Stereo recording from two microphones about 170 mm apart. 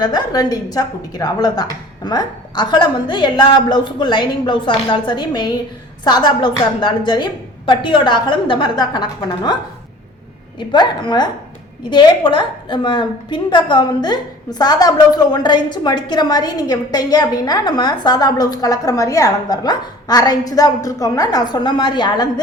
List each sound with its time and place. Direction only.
0.0 s a woman's voice: 25° left (ahead or behind)
10.6 s a woman's voice: 25° left (ahead or behind)